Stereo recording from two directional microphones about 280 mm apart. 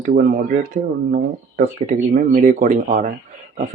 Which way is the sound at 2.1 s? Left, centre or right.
Right.